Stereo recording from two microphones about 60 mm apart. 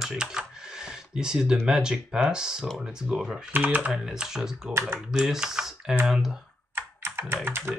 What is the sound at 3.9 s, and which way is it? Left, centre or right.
Speech, centre.